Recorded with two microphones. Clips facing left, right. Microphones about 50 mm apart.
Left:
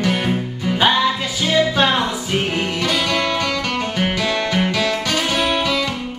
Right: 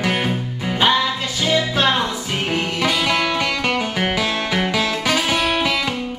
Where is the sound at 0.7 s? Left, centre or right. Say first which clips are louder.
Left 1 dB; centre.